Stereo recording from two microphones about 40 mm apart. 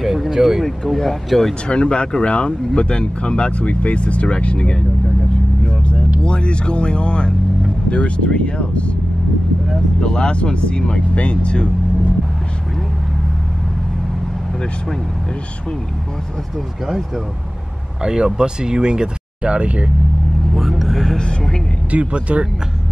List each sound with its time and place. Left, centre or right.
0.0 s a sound: centre
0.4 s speech: centre
0.7 s speech: centre
1.7 s speech: left
5.6 s vehicle: left
6.2 s speech: left
9.9 s speech: left
18.0 s speech: centre
20.8 s music: centre
21.2 s speech: left
21.9 s speech: right